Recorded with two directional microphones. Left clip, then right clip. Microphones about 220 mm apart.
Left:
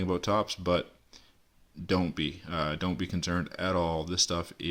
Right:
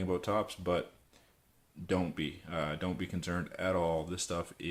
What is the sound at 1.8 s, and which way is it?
Speech, 40° left (ahead or behind).